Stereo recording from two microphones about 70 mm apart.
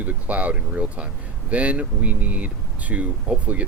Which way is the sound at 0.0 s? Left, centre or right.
Right.